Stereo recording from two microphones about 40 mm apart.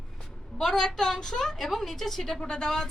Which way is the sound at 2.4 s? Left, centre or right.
Centre.